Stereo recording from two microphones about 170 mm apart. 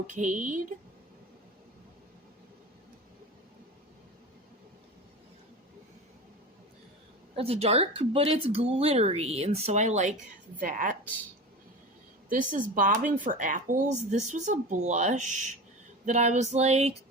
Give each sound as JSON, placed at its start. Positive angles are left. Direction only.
{"t": 0.1, "sound": "speech", "side_deg": -45}
{"t": 7.3, "sound": "speech", "side_deg": -35}
{"t": 12.3, "sound": "speech", "side_deg": -50}